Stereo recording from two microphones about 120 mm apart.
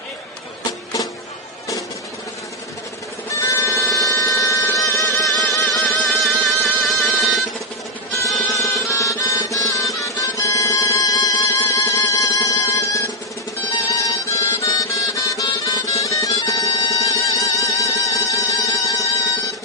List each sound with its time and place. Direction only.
0.9 s music: 30° left (ahead or behind)
3.3 s music: 25° left (ahead or behind)
5.7 s music: centre (ahead or behind)
8.5 s music: 25° left (ahead or behind)